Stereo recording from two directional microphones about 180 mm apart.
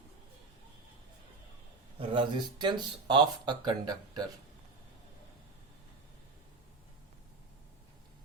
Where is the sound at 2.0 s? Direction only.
30° right (ahead or behind).